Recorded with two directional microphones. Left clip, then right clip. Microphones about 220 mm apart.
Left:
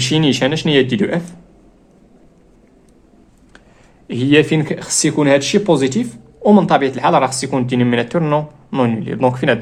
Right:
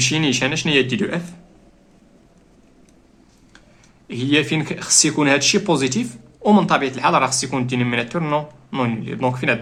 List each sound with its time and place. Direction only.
0.0 s speech: 25° left (ahead or behind)
4.1 s speech: 30° left (ahead or behind)